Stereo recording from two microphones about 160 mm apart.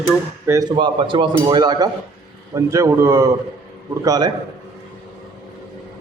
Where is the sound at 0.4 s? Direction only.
20° right (ahead or behind).